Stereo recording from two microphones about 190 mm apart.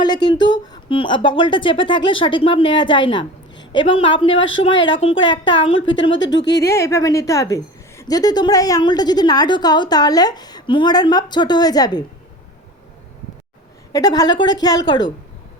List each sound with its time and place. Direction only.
0.0 s a woman's voice: 20° left (ahead or behind)
6.1 s speech: 70° left (ahead or behind)
6.7 s a woman's voice: 15° left (ahead or behind)
13.9 s a woman's voice: 20° left (ahead or behind)